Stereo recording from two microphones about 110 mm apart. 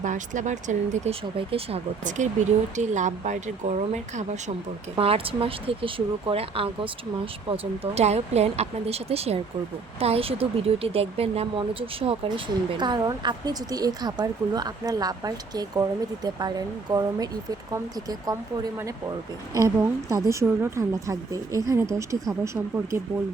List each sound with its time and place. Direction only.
0.0 s speech: 90° right
1.4 s speech: 60° right (ahead or behind); by 4.5 s 90° right
4.9 s speech: 60° right (ahead or behind)
7.5 s a woman's voice: 65° right (ahead or behind); by 22.4 s 30° right (ahead or behind)